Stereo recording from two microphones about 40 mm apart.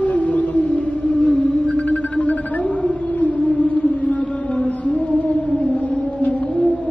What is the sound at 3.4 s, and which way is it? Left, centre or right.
Music, left.